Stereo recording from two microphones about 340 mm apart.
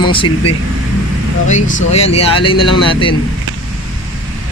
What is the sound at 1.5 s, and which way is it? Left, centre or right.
Speech, left.